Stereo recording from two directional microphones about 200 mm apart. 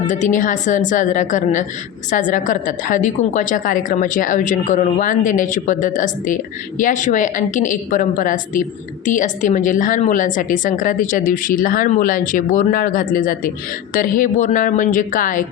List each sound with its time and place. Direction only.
0.1 s a woman's voice: 40° left (ahead or behind)